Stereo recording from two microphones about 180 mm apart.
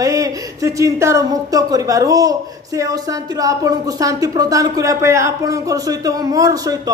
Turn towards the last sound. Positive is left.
turn(degrees=-20)  # may be behind; listen again after turning